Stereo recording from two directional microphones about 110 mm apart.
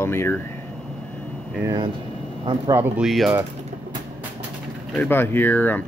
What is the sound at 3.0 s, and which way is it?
Speech, centre (ahead or behind).